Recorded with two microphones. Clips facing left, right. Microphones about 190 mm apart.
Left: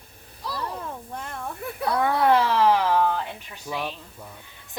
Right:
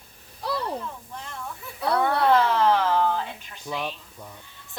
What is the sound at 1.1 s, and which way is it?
Speech, 55° left (ahead or behind).